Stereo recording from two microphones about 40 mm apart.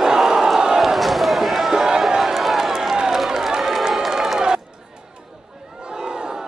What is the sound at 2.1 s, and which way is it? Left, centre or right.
Crowd, centre.